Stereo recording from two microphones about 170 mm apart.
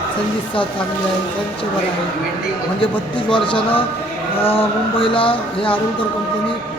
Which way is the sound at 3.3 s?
30° left (ahead or behind).